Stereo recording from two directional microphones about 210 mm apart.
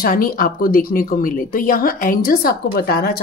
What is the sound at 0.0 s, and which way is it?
Speech, 45° left (ahead or behind).